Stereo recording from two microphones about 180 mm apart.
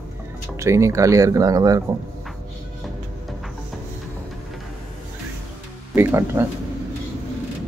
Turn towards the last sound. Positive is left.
turn(degrees=-15)  # may be behind; listen again after turning